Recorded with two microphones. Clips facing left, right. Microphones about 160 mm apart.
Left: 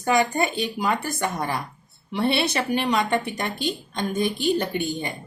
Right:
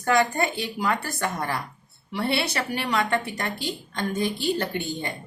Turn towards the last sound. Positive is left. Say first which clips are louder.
# left 2 dB
turn(degrees=15)  # may be behind; listen again after turning